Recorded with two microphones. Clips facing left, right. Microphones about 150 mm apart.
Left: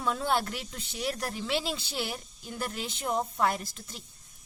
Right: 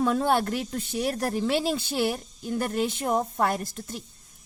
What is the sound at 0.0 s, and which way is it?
Speech, 50° right (ahead or behind).